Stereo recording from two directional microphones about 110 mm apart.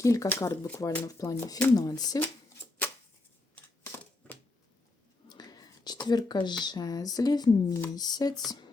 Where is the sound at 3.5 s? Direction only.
20° left (ahead or behind).